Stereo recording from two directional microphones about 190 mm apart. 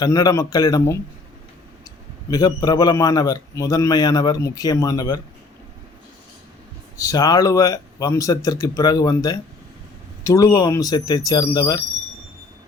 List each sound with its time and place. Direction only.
0.0 s a man's voice: 20° left (ahead or behind)
2.3 s a man's voice: 20° left (ahead or behind)
7.0 s a man's voice: 20° left (ahead or behind)